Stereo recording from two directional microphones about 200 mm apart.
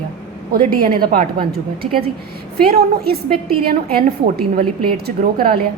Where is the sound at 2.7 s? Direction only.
50° right (ahead or behind).